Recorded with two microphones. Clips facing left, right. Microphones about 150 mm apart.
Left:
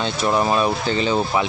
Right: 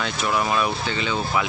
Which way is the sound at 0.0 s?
35° left (ahead or behind).